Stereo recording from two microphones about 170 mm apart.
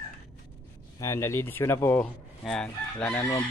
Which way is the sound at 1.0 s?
15° left (ahead or behind).